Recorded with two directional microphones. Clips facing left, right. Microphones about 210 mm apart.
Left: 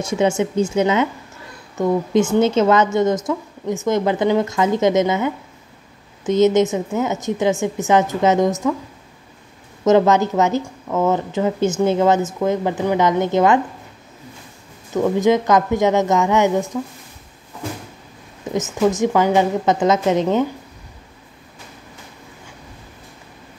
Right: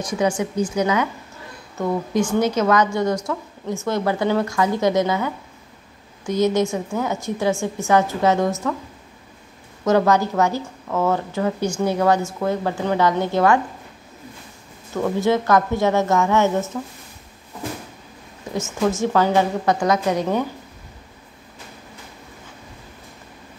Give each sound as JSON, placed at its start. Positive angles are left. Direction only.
{"t": 0.0, "sound": "a woman's voice", "side_deg": 25}
{"t": 9.8, "sound": "a woman's voice", "side_deg": 20}
{"t": 15.0, "sound": "speech", "side_deg": 15}
{"t": 18.5, "sound": "a woman's voice", "side_deg": 20}